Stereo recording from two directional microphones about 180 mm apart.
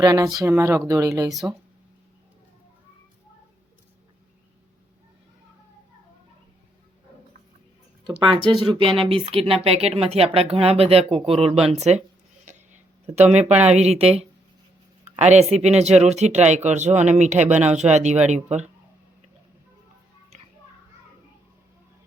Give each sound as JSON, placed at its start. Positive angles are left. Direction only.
{"t": 0.0, "sound": "speech", "side_deg": -20}
{"t": 8.4, "sound": "speech", "side_deg": -25}
{"t": 12.5, "sound": "a sound", "side_deg": -40}
{"t": 13.4, "sound": "speech", "side_deg": -5}
{"t": 13.7, "sound": "speech", "side_deg": -35}